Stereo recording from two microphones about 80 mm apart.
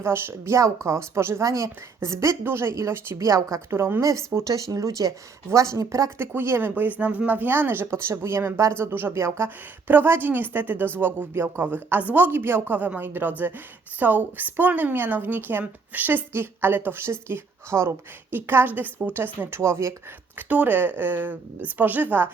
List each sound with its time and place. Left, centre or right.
0.0 s a woman's voice: right
3.2 s speech: right
3.7 s a woman's voice: right
4.5 s a woman's voice: right
6.1 s a woman's voice: right
20.5 s a woman's voice: right